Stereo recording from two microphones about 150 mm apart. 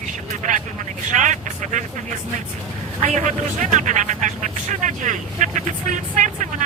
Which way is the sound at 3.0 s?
55° right (ahead or behind).